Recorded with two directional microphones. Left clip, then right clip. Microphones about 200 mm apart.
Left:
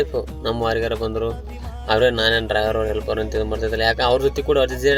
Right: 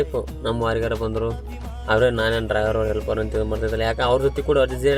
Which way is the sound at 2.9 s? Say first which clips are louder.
Left 1 dB; 20° right (ahead or behind).